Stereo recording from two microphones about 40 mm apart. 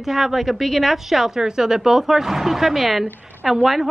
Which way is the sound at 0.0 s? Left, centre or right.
Centre.